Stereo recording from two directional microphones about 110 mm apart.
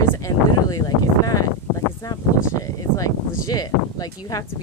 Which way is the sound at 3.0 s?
35° left (ahead or behind).